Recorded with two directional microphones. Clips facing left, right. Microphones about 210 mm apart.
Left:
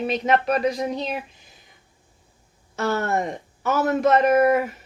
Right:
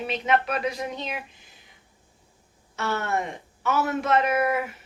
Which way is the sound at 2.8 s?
40° left (ahead or behind).